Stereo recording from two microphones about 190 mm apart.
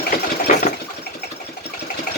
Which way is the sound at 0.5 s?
40° left (ahead or behind).